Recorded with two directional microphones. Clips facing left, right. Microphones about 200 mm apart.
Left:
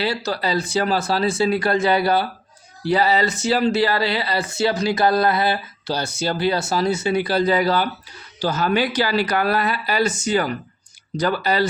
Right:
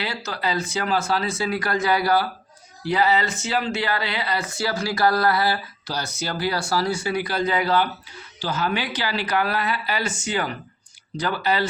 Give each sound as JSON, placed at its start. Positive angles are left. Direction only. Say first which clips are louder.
{"t": 0.0, "sound": "speech", "louder": "left 5 dB", "side_deg": 35}